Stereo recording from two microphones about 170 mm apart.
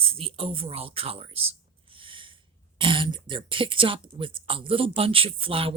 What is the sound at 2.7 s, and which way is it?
Speech, 30° right (ahead or behind).